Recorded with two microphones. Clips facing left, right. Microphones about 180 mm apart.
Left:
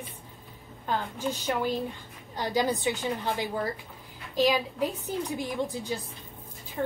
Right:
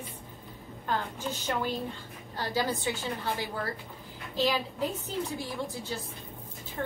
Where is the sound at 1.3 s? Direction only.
10° left (ahead or behind).